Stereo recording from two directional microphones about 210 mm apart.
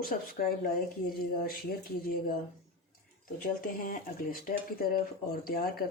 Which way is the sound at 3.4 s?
40° left (ahead or behind).